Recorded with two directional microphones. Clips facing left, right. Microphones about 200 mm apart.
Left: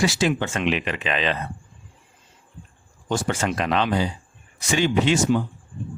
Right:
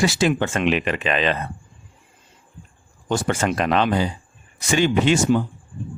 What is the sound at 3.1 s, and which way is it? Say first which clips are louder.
Speech: right 2 dB; 50° right (ahead or behind).